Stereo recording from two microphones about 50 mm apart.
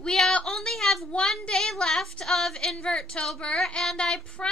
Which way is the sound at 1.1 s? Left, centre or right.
Centre.